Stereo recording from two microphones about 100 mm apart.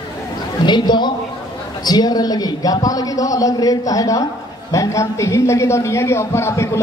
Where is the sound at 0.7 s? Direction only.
45° left (ahead or behind).